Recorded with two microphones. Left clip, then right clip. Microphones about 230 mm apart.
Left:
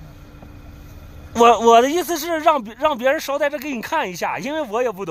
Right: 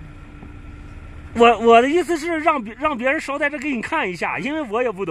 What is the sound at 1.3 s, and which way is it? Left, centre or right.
Speech, centre.